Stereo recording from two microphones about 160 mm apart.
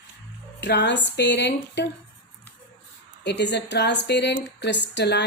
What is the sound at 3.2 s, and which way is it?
A woman's voice, 90° left.